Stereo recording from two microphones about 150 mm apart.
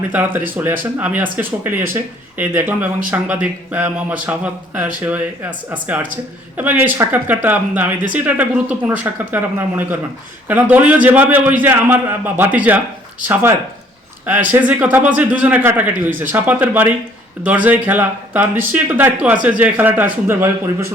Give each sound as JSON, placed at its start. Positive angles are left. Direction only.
{"t": 0.1, "sound": "speech", "side_deg": -10}